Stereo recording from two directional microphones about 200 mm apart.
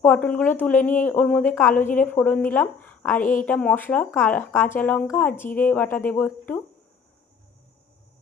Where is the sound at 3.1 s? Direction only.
40° left (ahead or behind).